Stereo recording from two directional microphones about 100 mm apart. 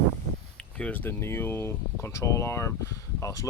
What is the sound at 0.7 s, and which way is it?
Speech, 15° left (ahead or behind).